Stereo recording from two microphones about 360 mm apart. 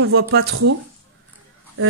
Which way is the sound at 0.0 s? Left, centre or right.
Right.